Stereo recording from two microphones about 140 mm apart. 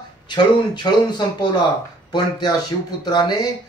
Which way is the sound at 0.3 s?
30° left (ahead or behind).